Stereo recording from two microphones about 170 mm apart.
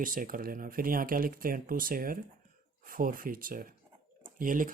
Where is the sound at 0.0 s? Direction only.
55° right (ahead or behind).